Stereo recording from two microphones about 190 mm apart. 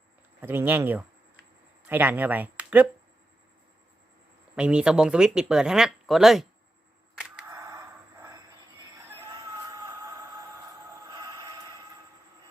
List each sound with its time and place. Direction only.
0.4 s speech: 10° right (ahead or behind)
4.5 s speech: 5° right (ahead or behind)
7.2 s single-lens reflex camera: 5° right (ahead or behind)
7.5 s a sound: 15° right (ahead or behind)